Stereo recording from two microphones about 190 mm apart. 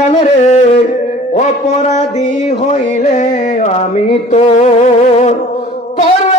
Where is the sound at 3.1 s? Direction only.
40° left (ahead or behind).